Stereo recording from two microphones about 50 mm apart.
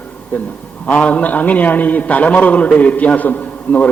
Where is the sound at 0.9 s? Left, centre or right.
Left.